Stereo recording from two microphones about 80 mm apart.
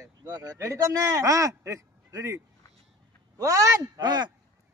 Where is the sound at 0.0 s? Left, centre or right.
Right.